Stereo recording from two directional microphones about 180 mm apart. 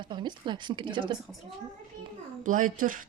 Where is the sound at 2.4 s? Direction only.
45° right (ahead or behind).